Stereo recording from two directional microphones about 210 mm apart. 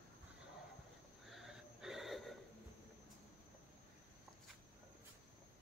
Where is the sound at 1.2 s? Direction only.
Centre (ahead or behind).